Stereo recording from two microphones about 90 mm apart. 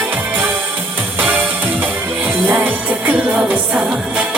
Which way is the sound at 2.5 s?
20° right (ahead or behind).